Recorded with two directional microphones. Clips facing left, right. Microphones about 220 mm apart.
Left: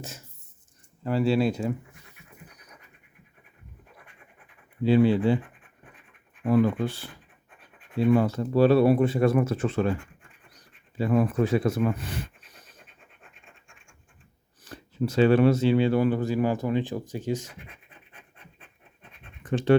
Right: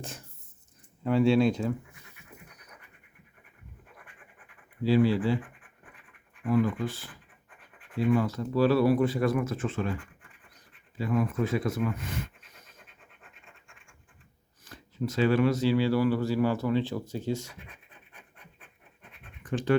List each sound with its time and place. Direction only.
1.0 s speech: 5° left (ahead or behind)
4.8 s speech: 20° left (ahead or behind)
6.5 s speech: 35° left (ahead or behind)
11.0 s speech: 30° left (ahead or behind)
14.7 s speech: 30° left (ahead or behind); by 17.5 s 15° left (ahead or behind)
19.4 s scratch: 25° left (ahead or behind)